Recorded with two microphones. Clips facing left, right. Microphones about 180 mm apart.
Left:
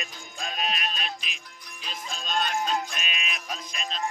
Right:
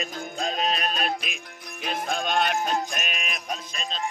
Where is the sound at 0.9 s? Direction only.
50° right (ahead or behind).